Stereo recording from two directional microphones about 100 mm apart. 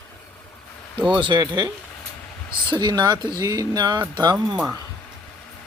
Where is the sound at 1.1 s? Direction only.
50° right (ahead or behind).